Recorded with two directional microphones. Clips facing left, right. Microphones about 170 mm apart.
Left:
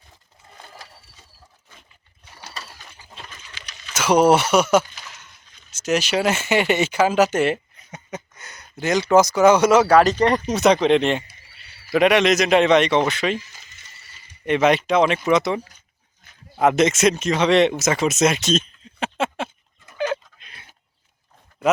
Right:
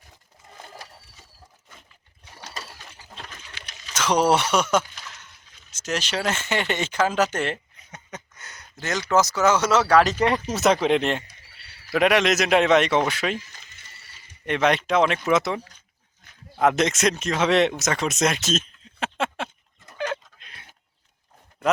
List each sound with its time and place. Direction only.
3.2 s sewing machine: 55° right (ahead or behind)
3.9 s speech: 10° left (ahead or behind)
13.7 s a sound: 55° right (ahead or behind)
14.4 s speech: 5° left (ahead or behind)
16.2 s dog: 5° left (ahead or behind)
16.6 s speech: centre (ahead or behind)
20.0 s a sound: 5° left (ahead or behind)